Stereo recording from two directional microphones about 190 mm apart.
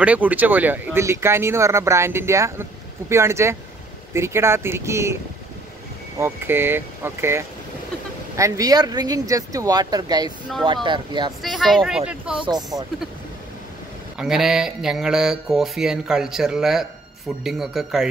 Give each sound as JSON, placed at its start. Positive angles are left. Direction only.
{"t": 0.0, "sound": "speech", "side_deg": -10}
{"t": 6.1, "sound": "speech", "side_deg": -10}
{"t": 11.4, "sound": "speech", "side_deg": 0}
{"t": 14.1, "sound": "speech", "side_deg": 0}